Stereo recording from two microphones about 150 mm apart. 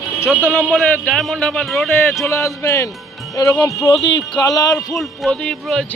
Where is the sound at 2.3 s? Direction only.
20° left (ahead or behind).